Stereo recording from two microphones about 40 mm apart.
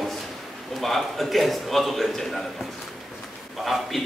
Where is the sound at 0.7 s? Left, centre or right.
Centre.